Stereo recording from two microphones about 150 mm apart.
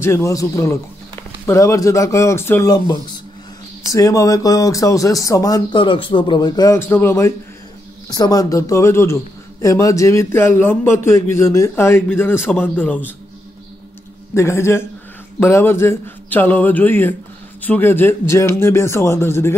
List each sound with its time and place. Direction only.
0.0 s a man's voice: 20° left (ahead or behind)
14.3 s a man's voice: 20° left (ahead or behind)